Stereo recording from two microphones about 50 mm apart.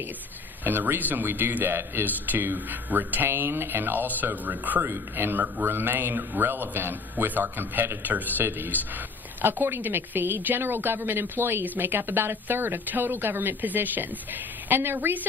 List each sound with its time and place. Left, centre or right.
0.7 s speech: right
3.3 s a man's voice: right
4.8 s a man's voice: right
11.6 s a man's voice: right